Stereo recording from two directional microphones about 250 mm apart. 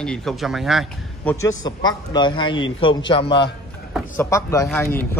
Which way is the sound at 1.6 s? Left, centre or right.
Centre.